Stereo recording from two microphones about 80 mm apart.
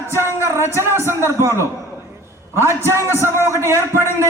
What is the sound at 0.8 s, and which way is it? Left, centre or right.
Speech, right.